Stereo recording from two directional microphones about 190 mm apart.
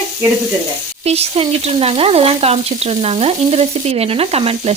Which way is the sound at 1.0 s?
35° right (ahead or behind).